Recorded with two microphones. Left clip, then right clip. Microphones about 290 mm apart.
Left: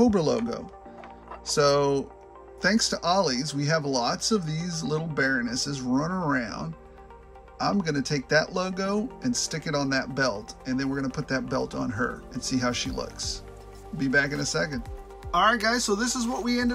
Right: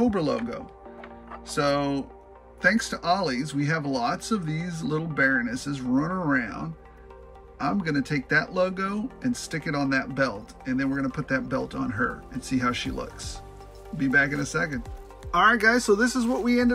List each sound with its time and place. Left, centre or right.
0.0 s speech: centre